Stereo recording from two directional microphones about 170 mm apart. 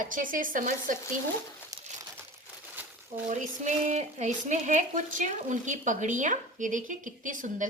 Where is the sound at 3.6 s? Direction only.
45° right (ahead or behind).